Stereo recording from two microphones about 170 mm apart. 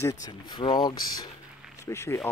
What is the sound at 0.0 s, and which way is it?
Speech, 20° left (ahead or behind).